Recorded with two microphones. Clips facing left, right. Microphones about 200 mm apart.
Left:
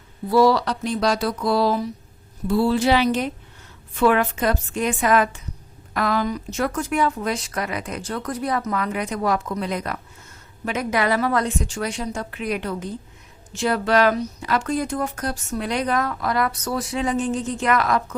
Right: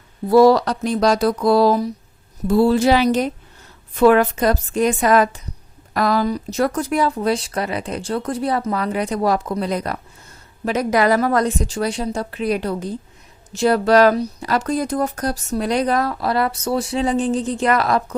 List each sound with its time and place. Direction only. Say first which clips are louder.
0.3 s speech: right 5 dB; 45° right (ahead or behind)